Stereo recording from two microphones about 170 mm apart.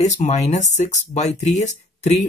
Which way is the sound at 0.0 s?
40° left (ahead or behind).